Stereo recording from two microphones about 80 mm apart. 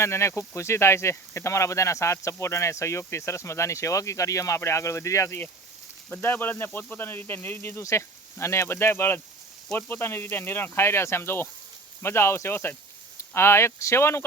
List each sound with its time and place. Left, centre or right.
0.0 s speech: left
6.1 s speech: left
7.8 s speech: left